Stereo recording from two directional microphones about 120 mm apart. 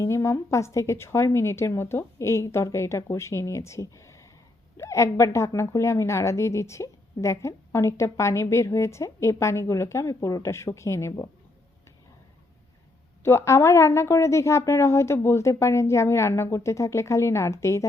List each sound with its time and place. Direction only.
0.0 s a woman's voice: 25° left (ahead or behind)
13.2 s a woman's voice: 25° left (ahead or behind)